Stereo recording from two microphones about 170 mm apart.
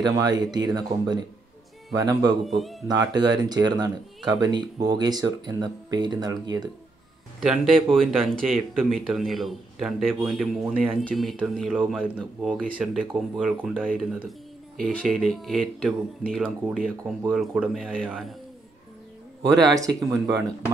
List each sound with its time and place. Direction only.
0.0 s speech: 25° right (ahead or behind)
2.4 s a man's voice: centre (ahead or behind)
2.9 s speech: 25° right (ahead or behind)
7.3 s a man's voice: centre (ahead or behind)
18.0 s speech: 10° right (ahead or behind)
19.6 s speech: 20° right (ahead or behind)